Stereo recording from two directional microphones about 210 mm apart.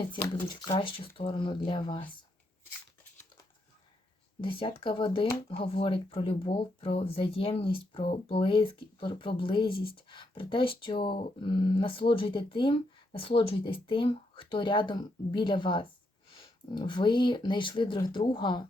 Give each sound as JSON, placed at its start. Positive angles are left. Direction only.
{"t": 0.7, "sound": "speech", "side_deg": 25}
{"t": 4.4, "sound": "speech", "side_deg": 25}